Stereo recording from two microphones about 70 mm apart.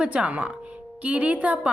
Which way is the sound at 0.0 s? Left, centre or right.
Centre.